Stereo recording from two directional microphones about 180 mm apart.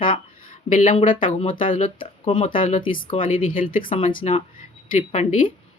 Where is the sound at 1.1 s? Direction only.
30° left (ahead or behind).